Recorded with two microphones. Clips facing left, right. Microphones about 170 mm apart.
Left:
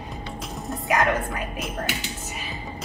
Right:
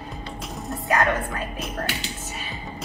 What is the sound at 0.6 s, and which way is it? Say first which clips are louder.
Music: even; centre (ahead or behind).